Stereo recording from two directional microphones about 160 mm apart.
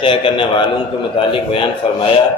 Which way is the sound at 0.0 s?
30° left (ahead or behind).